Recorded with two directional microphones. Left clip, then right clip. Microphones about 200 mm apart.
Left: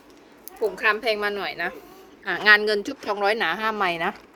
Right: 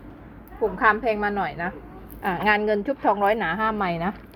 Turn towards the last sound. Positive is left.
turn(degrees=45)  # may be behind; listen again after turning